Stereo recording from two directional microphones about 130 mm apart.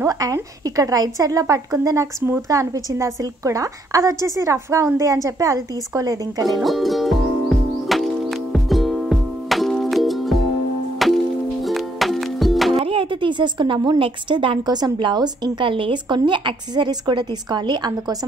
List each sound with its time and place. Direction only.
0.0 s a woman's voice: 25° right (ahead or behind)
6.6 s music: centre (ahead or behind)
12.7 s speech: 45° right (ahead or behind)